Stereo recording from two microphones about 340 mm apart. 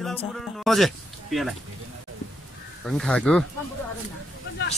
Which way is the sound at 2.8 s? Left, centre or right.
Centre.